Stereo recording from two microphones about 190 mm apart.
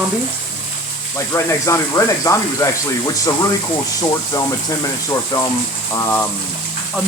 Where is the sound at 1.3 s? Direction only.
15° left (ahead or behind).